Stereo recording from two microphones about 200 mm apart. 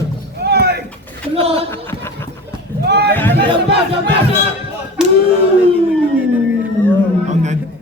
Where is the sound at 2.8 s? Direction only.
55° right (ahead or behind).